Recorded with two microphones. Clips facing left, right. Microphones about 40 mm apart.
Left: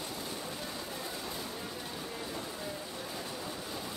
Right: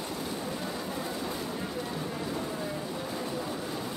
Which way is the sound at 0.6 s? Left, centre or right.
Right.